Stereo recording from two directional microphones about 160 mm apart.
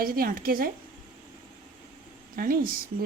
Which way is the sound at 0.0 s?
65° right (ahead or behind).